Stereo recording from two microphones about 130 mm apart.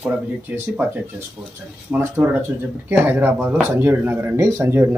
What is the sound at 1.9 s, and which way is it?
Speech, 20° right (ahead or behind).